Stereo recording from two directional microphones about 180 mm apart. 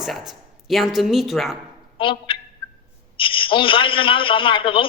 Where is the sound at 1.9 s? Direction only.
30° left (ahead or behind).